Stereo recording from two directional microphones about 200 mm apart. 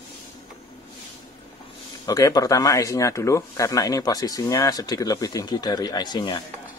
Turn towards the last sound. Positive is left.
turn(degrees=20)  # may be behind; listen again after turning